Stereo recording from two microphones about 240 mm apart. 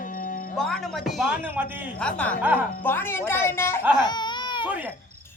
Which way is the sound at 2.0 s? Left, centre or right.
Centre.